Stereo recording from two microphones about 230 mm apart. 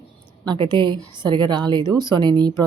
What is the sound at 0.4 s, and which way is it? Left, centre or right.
A woman's voice, centre.